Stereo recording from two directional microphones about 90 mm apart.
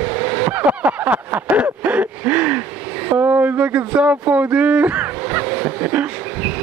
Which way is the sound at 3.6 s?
15° right (ahead or behind).